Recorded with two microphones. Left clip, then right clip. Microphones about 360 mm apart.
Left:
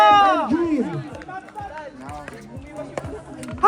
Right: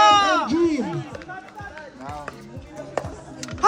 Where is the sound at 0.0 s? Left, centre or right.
Centre.